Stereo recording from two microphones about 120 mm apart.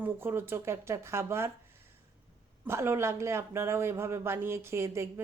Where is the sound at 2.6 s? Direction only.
20° right (ahead or behind).